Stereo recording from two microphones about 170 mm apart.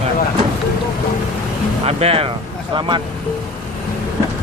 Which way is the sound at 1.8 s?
35° right (ahead or behind).